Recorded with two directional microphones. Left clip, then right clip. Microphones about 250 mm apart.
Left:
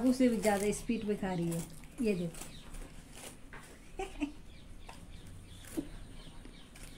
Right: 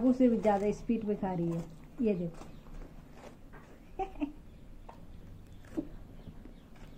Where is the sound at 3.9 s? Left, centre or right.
Centre.